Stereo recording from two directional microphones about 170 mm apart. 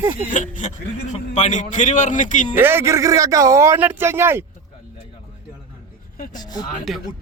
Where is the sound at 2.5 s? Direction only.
15° right (ahead or behind).